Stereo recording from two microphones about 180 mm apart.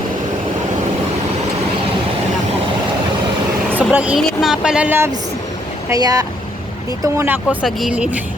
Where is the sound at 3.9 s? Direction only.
5° right (ahead or behind).